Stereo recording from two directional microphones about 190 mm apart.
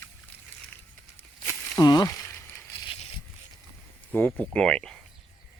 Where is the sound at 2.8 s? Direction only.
25° left (ahead or behind).